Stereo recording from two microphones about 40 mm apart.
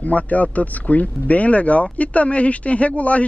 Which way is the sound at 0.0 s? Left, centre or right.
Left.